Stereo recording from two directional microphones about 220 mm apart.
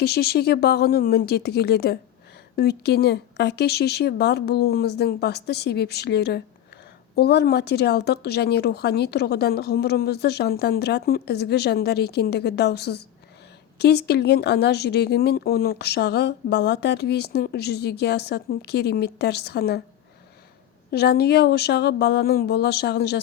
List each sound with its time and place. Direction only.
0.0 s speech: 45° left (ahead or behind)
20.9 s speech: 45° left (ahead or behind)